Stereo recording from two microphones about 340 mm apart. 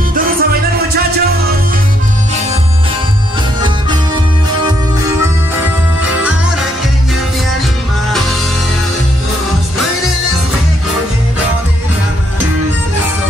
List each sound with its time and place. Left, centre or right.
0.1 s music: right